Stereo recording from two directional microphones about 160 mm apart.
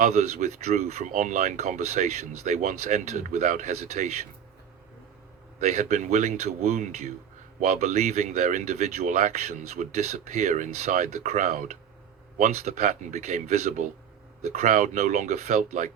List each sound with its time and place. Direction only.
0.0 s speech: 45° right (ahead or behind)
5.5 s speech: 45° right (ahead or behind)